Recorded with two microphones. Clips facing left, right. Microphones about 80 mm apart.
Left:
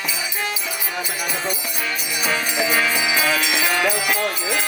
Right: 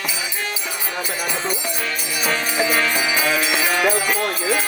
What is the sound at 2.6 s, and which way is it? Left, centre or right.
Music, centre.